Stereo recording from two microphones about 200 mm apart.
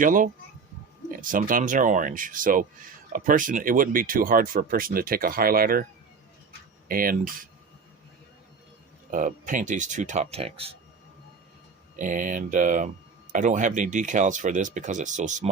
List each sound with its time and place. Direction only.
0.0 s speech: 40° right (ahead or behind)
6.8 s speech: 45° right (ahead or behind)
9.0 s speech: 40° right (ahead or behind)
11.9 s speech: 40° right (ahead or behind)